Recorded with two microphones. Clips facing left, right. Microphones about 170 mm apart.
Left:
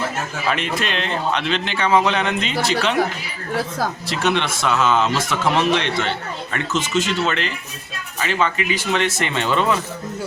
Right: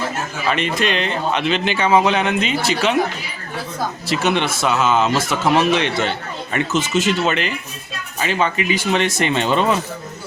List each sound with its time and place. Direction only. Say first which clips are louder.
0.4 s speech: right 4 dB; centre (ahead or behind)
4.0 s speech: right 4 dB; 5° right (ahead or behind)